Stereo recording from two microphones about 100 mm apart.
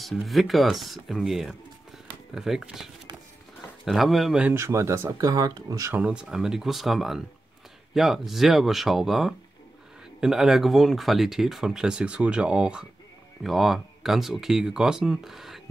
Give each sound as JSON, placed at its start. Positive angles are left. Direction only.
{"t": 0.0, "sound": "speech", "side_deg": 0}
{"t": 4.6, "sound": "speech", "side_deg": -30}
{"t": 6.0, "sound": "speech", "side_deg": -5}